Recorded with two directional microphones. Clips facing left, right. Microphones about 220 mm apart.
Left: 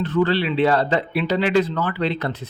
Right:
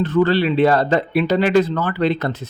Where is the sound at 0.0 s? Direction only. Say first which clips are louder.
Right 4 dB; 45° right (ahead or behind).